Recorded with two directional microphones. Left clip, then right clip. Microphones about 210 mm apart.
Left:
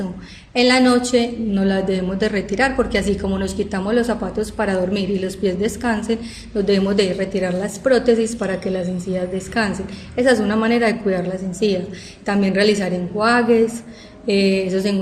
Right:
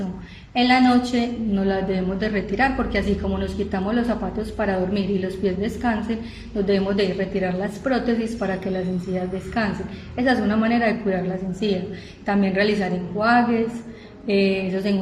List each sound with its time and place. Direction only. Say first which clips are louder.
0.5 s a woman's voice: left 3 dB; 55° left (ahead or behind)
9.6 s a woman's voice: left 4 dB; 50° left (ahead or behind)